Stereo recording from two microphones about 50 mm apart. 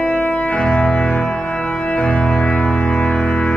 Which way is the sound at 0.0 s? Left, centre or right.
Left.